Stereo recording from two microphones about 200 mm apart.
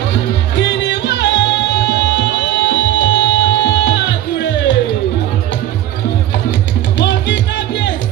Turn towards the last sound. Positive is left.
turn(degrees=65)  # may be behind; listen again after turning